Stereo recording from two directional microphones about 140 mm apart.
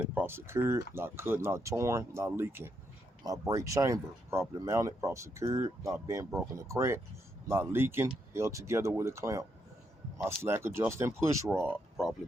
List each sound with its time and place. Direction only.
0.0 s speech: 15° right (ahead or behind)